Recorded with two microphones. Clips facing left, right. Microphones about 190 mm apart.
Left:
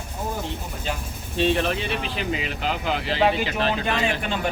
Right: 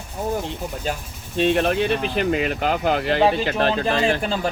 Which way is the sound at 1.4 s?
50° right (ahead or behind).